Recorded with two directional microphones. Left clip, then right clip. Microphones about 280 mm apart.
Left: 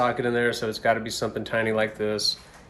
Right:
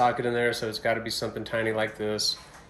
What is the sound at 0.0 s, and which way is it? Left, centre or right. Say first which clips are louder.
Speech: left 1 dB; centre.